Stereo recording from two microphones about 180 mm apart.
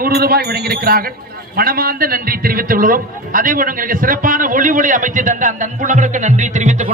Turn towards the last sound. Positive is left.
turn(degrees=-40)  # may be behind; listen again after turning